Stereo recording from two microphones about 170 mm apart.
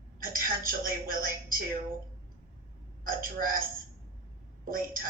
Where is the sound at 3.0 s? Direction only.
55° right (ahead or behind).